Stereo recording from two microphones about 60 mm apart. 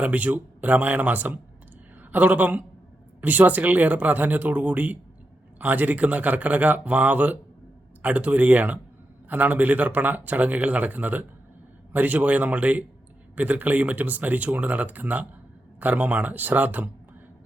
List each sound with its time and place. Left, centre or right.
0.0 s speech: right